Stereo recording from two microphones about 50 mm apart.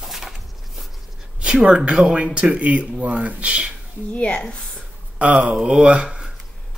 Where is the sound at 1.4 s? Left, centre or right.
Centre.